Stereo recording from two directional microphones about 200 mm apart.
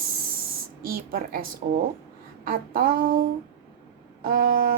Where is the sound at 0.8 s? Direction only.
45° right (ahead or behind).